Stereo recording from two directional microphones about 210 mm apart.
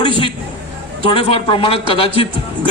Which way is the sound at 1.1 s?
25° left (ahead or behind).